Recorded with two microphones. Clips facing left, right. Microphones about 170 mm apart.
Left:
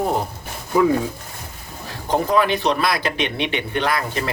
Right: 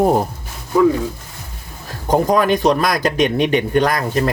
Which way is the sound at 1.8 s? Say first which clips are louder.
Right 5 dB; 45° right (ahead or behind).